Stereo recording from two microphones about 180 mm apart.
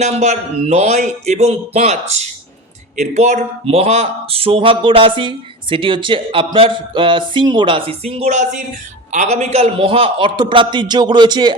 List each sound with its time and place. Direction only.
0.0 s speech: 40° right (ahead or behind); by 11.5 s 25° right (ahead or behind)